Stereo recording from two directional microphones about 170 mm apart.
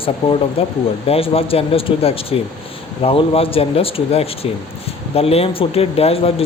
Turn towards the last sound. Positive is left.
turn(degrees=35)  # may be behind; listen again after turning